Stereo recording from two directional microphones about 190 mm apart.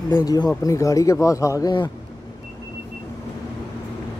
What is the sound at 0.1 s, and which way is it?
Speech, 20° left (ahead or behind).